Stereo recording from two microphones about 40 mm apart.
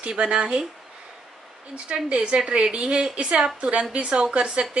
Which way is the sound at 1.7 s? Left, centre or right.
Right.